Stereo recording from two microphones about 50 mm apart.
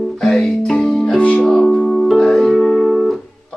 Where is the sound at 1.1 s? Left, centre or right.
Left.